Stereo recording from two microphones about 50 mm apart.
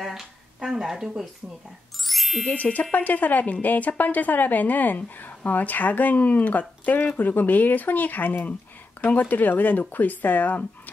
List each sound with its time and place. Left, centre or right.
0.0 s a sound: centre
2.0 s music: centre
2.4 s a woman's voice: left